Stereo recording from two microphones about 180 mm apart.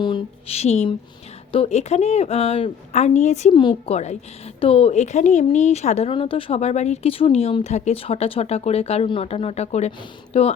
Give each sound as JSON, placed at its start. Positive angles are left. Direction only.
{"t": 0.0, "sound": "a woman's voice", "side_deg": 30}
{"t": 3.5, "sound": "a woman's voice", "side_deg": 25}